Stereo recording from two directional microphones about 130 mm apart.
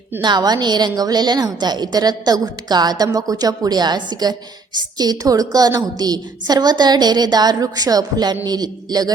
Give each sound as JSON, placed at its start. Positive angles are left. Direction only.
{"t": 0.2, "sound": "a woman's voice", "side_deg": -35}